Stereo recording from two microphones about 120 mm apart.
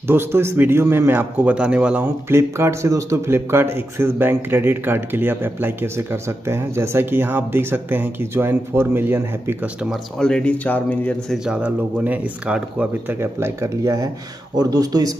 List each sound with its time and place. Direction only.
0.0 s a man's voice: 20° right (ahead or behind)
2.3 s speech: 25° right (ahead or behind)
9.8 s speech: 5° left (ahead or behind)
11.3 s a man's voice: 5° right (ahead or behind)
13.2 s speech: 20° right (ahead or behind)